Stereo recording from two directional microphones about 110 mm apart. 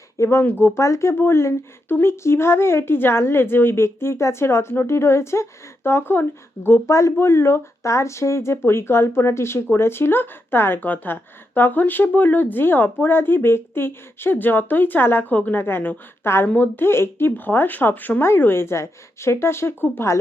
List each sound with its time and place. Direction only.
0.2 s speech: 25° left (ahead or behind)